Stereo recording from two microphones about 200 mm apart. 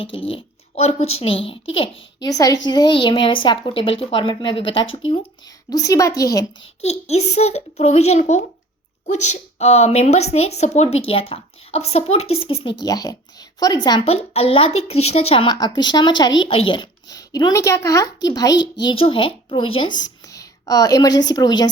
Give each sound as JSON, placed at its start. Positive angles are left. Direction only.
{"t": 0.0, "sound": "a child's voice", "side_deg": 30}
{"t": 6.8, "sound": "a child's voice", "side_deg": 35}